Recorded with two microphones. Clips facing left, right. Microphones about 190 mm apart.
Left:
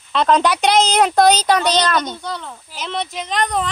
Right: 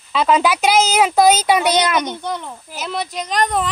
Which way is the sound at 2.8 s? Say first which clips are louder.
Right 1 dB; 5° right (ahead or behind).